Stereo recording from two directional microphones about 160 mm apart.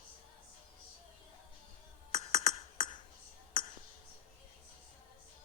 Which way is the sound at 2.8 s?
55° left (ahead or behind).